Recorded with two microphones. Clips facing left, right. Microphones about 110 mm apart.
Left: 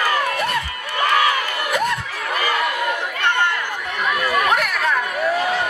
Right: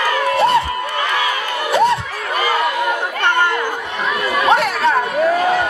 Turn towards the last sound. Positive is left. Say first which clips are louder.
# right 5 dB
turn(degrees=-30)  # may be behind; listen again after turning